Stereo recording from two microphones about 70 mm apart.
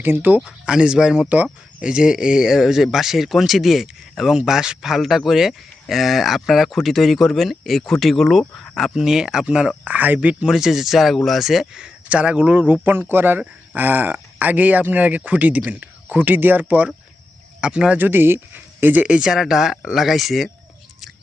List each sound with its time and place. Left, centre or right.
0.0 s speech: right
0.4 s speech: centre
10.5 s speech: centre
18.0 s speech: right
19.0 s speech: centre